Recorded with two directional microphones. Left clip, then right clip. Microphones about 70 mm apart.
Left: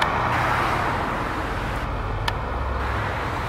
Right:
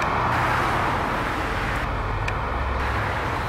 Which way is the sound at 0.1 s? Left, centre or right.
Left.